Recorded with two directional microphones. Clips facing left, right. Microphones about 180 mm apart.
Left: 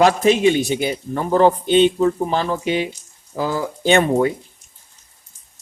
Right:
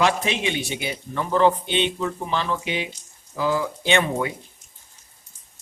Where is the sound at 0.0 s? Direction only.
45° left (ahead or behind).